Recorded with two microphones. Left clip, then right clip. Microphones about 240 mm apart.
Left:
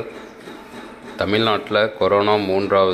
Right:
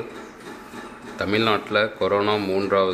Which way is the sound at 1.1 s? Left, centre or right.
Centre.